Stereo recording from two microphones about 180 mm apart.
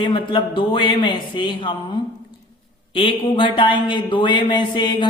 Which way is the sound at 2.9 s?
30° left (ahead or behind).